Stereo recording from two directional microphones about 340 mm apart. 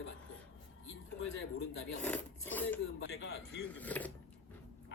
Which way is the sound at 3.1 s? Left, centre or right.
Left.